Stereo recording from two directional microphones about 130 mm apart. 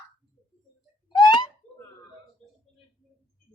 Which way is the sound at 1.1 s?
35° left (ahead or behind).